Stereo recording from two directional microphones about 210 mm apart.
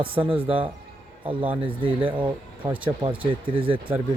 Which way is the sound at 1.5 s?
25° right (ahead or behind).